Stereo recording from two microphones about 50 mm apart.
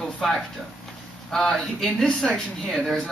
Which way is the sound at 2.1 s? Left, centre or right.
Left.